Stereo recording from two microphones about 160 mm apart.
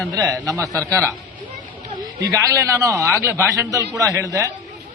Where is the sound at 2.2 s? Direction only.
20° right (ahead or behind).